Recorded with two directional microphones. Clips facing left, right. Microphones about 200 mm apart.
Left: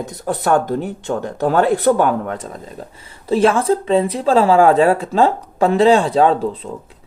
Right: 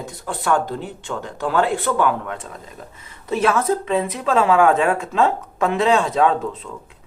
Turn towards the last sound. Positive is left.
turn(degrees=35)  # may be behind; listen again after turning